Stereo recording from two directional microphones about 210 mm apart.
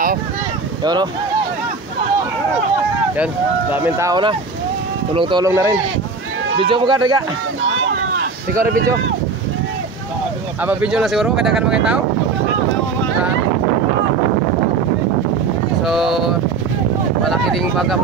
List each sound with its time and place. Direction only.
3.7 s speech: 10° right (ahead or behind)
10.6 s speech: 5° right (ahead or behind)
15.8 s speech: centre (ahead or behind)
17.2 s boat: centre (ahead or behind)